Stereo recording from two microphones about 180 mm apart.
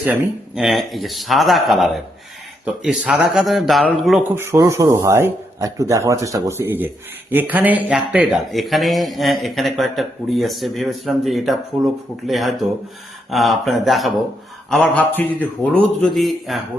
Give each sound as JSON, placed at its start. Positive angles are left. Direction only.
{"t": 0.0, "sound": "a man's voice", "side_deg": -5}
{"t": 4.4, "sound": "a man's voice", "side_deg": -15}